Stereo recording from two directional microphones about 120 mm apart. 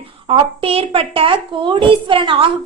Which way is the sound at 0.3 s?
50° right (ahead or behind).